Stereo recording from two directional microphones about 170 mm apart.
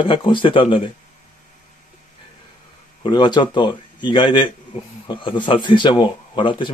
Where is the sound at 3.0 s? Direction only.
25° left (ahead or behind).